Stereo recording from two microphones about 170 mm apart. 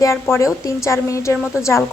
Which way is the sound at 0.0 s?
15° left (ahead or behind).